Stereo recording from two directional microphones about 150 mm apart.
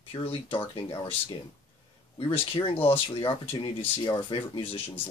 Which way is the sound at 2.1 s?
40° left (ahead or behind).